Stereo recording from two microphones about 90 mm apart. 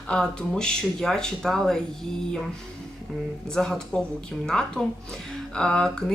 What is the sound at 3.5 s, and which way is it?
Speech, 5° left (ahead or behind).